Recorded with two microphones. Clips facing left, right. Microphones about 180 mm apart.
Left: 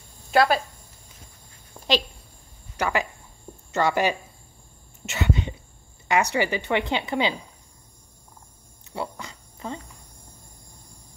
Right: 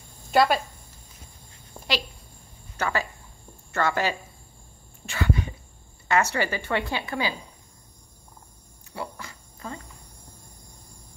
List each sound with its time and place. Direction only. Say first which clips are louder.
0.3 s speech: left 1 dB; centre (ahead or behind)
2.8 s speech: left 2 dB; 15° left (ahead or behind)
5.0 s cough: left 1 dB; 20° left (ahead or behind)
6.0 s a woman's voice: left 1 dB; 15° left (ahead or behind)
8.9 s dog: left 3 dB; 20° left (ahead or behind)